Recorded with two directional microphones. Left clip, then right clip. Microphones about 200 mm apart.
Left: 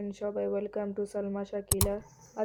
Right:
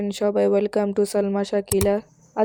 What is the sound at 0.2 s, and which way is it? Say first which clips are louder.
Speech: right 13 dB; 55° right (ahead or behind).